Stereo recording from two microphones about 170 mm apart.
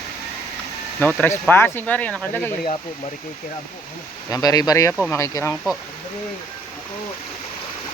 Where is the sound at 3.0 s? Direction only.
55° left (ahead or behind).